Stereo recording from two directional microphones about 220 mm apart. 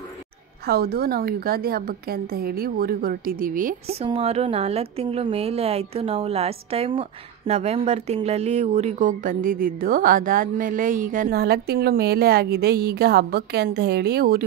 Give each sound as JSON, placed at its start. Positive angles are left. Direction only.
{"t": 0.7, "sound": "a woman's voice", "side_deg": -45}